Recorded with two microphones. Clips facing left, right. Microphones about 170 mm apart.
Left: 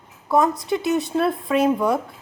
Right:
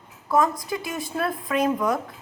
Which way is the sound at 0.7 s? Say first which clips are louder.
Left 8 dB; 25° left (ahead or behind).